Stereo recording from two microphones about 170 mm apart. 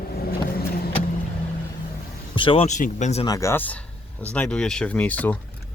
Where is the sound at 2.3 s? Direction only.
30° left (ahead or behind).